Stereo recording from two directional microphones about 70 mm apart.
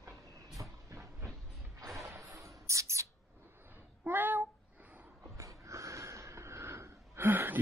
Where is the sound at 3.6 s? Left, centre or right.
Right.